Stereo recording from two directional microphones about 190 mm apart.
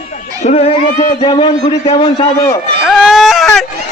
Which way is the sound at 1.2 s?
25° left (ahead or behind).